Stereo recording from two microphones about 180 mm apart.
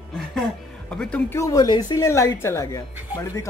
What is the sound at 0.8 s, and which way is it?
Speech, 5° left (ahead or behind).